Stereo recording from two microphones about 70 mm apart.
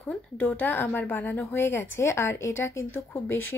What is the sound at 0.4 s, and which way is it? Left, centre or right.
A woman's voice, left.